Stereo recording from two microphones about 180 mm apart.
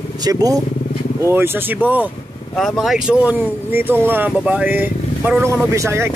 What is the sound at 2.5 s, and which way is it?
Speech, centre (ahead or behind).